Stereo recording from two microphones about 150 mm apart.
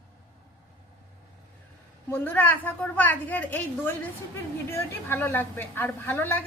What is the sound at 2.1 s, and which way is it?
A woman's voice, 10° left (ahead or behind).